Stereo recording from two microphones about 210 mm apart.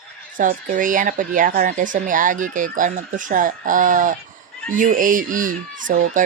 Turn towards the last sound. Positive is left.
turn(degrees=-40)  # may be behind; listen again after turning